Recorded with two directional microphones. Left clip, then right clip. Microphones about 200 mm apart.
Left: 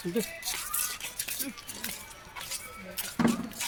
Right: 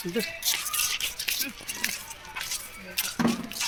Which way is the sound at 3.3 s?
10° left (ahead or behind).